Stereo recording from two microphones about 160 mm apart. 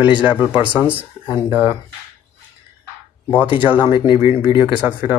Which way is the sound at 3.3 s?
10° right (ahead or behind).